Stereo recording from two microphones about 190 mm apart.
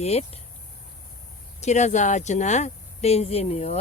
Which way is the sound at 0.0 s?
35° left (ahead or behind).